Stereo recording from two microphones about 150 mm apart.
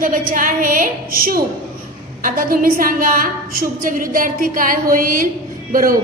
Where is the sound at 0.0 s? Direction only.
65° right (ahead or behind).